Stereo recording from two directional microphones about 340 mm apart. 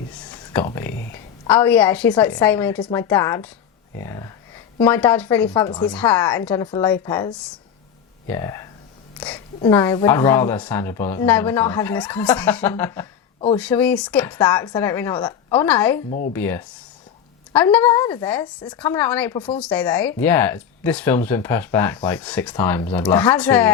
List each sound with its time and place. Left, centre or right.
0.3 s a sound: centre
1.1 s speech: centre
16.0 s speech: left
16.3 s speech: centre